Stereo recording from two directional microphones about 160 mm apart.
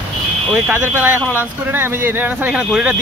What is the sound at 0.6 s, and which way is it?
Speech, 10° right (ahead or behind).